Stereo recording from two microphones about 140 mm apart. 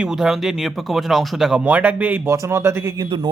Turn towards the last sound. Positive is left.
turn(degrees=-35)  # may be behind; listen again after turning